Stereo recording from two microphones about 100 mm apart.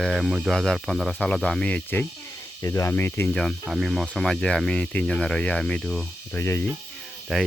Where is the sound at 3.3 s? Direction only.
5° left (ahead or behind).